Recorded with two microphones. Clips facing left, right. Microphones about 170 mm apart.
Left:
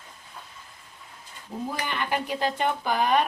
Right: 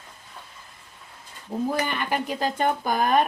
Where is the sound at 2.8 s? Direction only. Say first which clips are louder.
Right 1 dB; 45° right (ahead or behind).